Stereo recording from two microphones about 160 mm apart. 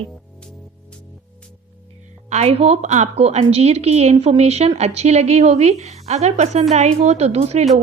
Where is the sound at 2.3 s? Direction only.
40° right (ahead or behind).